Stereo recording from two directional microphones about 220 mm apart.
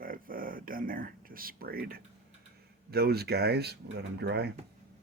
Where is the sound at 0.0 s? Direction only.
40° right (ahead or behind).